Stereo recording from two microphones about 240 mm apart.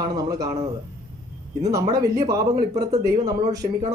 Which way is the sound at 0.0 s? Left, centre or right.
Centre.